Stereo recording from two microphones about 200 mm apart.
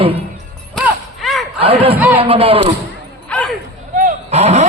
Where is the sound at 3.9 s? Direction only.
35° right (ahead or behind).